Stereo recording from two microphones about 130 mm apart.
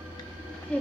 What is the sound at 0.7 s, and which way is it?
Insect, 10° left (ahead or behind).